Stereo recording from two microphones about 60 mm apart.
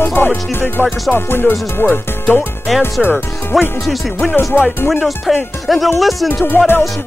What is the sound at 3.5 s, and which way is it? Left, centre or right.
Music, centre.